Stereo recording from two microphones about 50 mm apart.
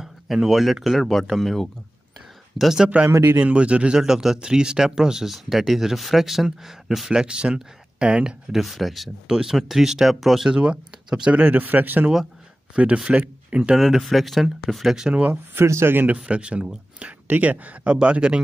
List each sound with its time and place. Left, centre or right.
0.0 s speech: centre
2.9 s speech: right
8.5 s speech: centre
10.5 s speech: centre
11.4 s speech: right
12.7 s speech: right
13.7 s speech: centre
15.6 s speech: right
16.3 s speech: right
17.3 s speech: right
17.9 s speech: right